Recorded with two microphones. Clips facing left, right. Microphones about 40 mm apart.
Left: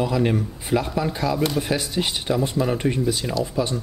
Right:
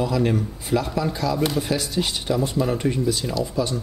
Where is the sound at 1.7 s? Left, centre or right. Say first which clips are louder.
Even; centre.